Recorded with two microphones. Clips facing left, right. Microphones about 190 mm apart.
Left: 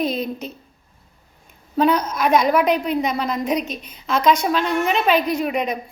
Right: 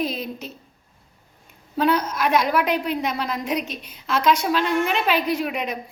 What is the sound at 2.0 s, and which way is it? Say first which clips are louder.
Speech: left 4 dB; 50° left (ahead or behind).